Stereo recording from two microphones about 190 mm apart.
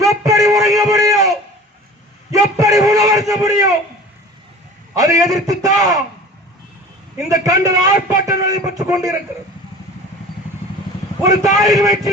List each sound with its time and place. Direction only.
0.0 s a sound: 20° right (ahead or behind)
4.9 s a man's voice: 20° right (ahead or behind)
7.3 s a man's voice: 20° right (ahead or behind)
11.2 s a man's voice: 20° right (ahead or behind)